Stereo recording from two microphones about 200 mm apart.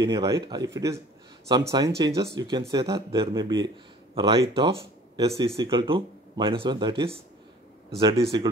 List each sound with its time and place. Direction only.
0.1 s a man's voice: 20° right (ahead or behind)